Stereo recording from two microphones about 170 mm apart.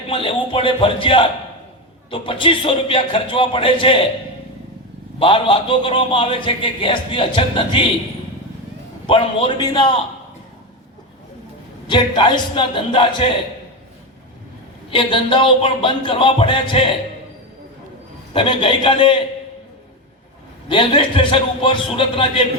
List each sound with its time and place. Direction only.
0.1 s a man's voice: 30° left (ahead or behind)
5.2 s a man's voice: 30° left (ahead or behind)
9.0 s speech: 30° left (ahead or behind)
11.9 s speech: 30° left (ahead or behind)
14.8 s a man's voice: 30° left (ahead or behind)
18.3 s a man's voice: 30° left (ahead or behind)
20.7 s a man's voice: 30° left (ahead or behind)